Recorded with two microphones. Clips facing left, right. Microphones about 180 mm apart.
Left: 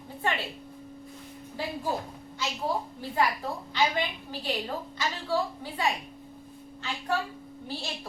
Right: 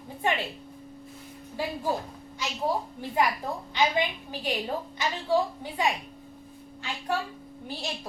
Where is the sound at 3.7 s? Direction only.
15° right (ahead or behind).